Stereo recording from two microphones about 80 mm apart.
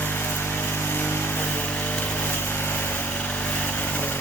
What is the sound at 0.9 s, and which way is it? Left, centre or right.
Light engine, left.